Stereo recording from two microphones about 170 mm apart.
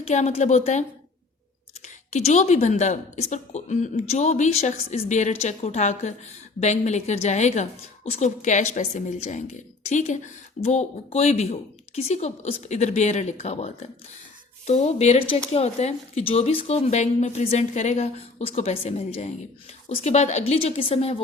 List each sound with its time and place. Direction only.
0.0 s a woman's voice: 45° left (ahead or behind)
2.0 s a woman's voice: 40° left (ahead or behind)